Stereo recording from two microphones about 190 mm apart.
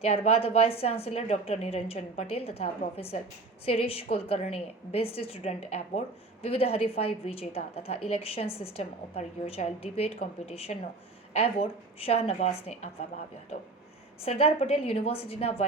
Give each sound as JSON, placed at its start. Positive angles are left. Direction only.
{"t": 0.0, "sound": "a woman's voice", "side_deg": 30}
{"t": 14.2, "sound": "a woman's voice", "side_deg": 30}